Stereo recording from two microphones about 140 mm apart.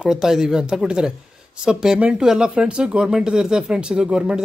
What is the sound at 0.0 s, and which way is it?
Speech, 5° right (ahead or behind).